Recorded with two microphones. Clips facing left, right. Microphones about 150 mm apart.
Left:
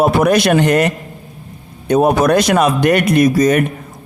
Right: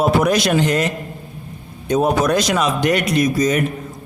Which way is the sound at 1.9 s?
60° left (ahead or behind).